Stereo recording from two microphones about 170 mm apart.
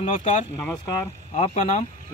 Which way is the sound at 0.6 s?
20° left (ahead or behind).